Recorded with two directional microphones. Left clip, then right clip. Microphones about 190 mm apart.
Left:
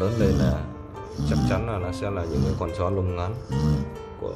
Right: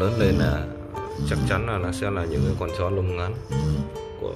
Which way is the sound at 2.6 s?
15° left (ahead or behind).